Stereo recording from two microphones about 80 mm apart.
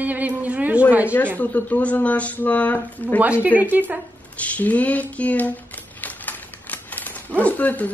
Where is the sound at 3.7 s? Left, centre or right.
Right.